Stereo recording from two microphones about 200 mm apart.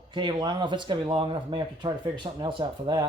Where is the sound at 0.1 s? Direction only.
20° right (ahead or behind).